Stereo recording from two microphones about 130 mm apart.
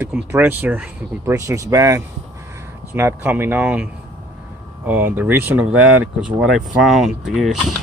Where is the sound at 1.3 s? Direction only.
25° right (ahead or behind); by 7.5 s centre (ahead or behind).